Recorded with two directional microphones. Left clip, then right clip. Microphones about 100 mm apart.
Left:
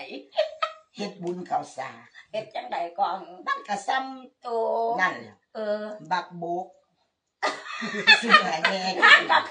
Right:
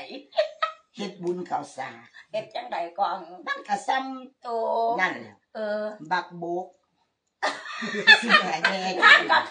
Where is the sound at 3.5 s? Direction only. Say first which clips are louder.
Even; 25° left (ahead or behind).